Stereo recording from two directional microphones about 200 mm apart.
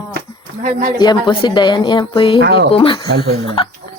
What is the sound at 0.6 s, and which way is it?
Speech, 40° right (ahead or behind).